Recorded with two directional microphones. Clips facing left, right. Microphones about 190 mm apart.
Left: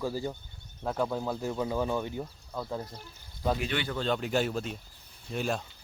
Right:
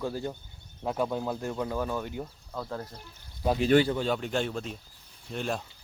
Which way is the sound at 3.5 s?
35° right (ahead or behind).